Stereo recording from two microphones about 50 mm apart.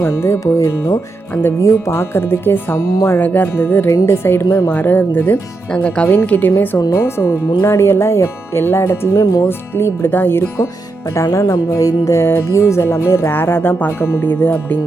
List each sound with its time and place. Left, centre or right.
0.2 s speech: left
0.7 s speech: left
3.2 s speech: left
3.8 s speech: left
4.7 s speech: left
6.9 s speech: left
8.6 s speech: left
11.1 s speech: left
12.2 s speech: left
12.5 s speech: left